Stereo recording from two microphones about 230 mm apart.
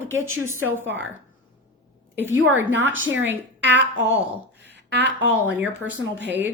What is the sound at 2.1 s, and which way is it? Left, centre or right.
Speech, centre.